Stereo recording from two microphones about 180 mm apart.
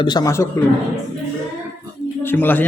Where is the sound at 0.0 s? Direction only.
20° left (ahead or behind).